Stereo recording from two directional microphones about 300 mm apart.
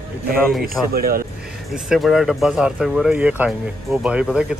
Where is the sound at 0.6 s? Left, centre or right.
Right.